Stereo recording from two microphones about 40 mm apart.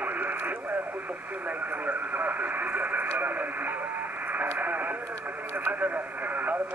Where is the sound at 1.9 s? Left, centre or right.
Right.